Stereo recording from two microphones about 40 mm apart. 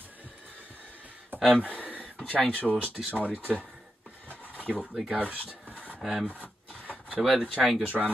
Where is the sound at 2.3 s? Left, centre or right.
Left.